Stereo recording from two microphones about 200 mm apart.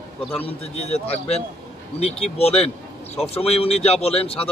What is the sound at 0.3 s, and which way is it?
A man's voice, 30° left (ahead or behind).